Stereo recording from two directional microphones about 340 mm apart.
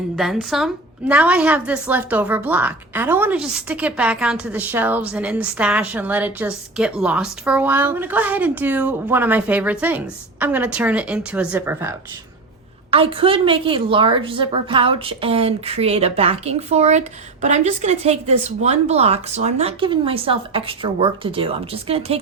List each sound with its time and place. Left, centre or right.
0.2 s a woman's voice: centre